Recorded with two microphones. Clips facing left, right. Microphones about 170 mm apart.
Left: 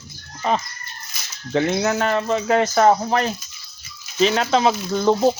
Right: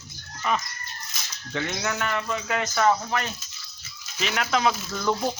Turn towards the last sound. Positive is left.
turn(degrees=30)  # may be behind; listen again after turning